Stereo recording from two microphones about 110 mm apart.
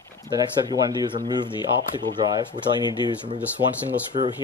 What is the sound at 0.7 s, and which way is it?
Speech, 40° right (ahead or behind).